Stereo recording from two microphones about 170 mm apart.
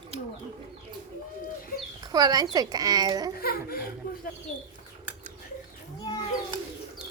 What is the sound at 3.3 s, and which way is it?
Speech, 60° left (ahead or behind).